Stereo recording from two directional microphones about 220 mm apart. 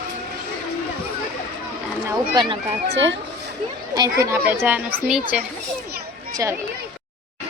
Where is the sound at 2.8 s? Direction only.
50° right (ahead or behind).